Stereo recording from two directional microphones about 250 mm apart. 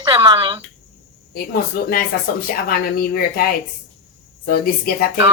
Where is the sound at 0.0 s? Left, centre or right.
Centre.